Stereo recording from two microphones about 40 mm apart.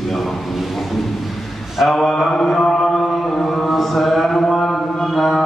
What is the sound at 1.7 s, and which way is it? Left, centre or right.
Mantra, centre.